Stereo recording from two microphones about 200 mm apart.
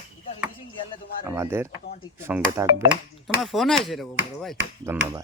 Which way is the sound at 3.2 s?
Centre (ahead or behind).